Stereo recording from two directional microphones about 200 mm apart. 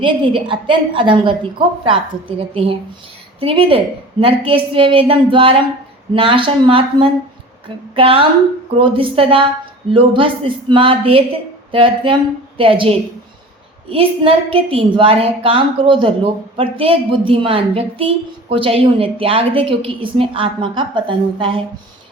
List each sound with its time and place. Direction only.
0.0 s a woman's voice: 25° right (ahead or behind)
3.4 s a woman's voice: 25° right (ahead or behind)